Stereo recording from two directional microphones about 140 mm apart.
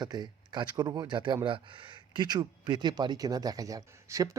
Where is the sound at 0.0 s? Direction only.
30° right (ahead or behind).